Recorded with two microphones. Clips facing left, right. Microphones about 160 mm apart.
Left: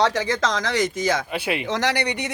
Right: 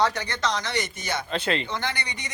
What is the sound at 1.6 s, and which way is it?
Speech, 85° left.